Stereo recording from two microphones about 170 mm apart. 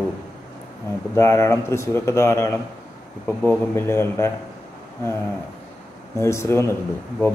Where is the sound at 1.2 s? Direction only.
15° left (ahead or behind).